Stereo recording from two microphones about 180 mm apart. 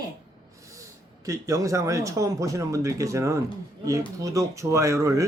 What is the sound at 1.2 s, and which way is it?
Speech, 20° right (ahead or behind).